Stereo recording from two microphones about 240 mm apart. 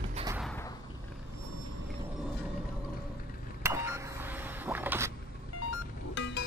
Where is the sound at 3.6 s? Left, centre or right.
Centre.